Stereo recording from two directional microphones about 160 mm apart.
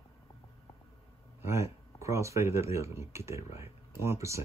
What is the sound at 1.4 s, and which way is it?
Speech, 15° right (ahead or behind).